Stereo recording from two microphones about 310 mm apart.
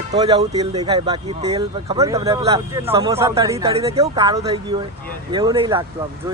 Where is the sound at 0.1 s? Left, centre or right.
Centre.